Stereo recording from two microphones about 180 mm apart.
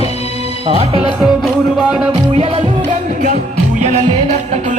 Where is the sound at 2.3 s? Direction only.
40° right (ahead or behind).